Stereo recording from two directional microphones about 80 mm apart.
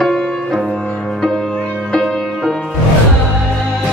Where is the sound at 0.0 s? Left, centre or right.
Centre.